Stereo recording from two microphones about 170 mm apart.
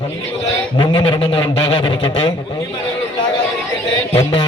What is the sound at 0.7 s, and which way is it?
A man's voice, 30° left (ahead or behind).